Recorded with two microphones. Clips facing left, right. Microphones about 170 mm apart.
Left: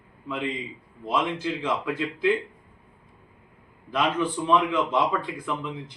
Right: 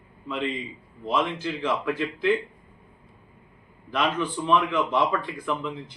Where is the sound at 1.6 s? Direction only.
15° left (ahead or behind).